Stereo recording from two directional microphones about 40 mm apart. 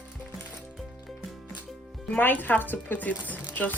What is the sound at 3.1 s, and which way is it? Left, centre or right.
Speech, left.